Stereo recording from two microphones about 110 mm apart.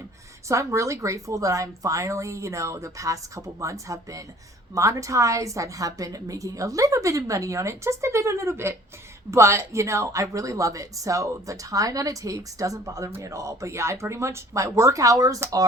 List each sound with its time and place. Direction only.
0.4 s a woman's voice: 25° right (ahead or behind)